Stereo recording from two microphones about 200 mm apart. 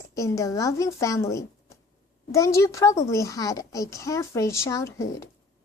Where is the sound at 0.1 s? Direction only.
15° left (ahead or behind).